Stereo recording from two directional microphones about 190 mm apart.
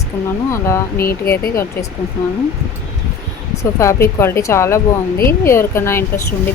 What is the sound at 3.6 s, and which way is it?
Speech, 15° left (ahead or behind).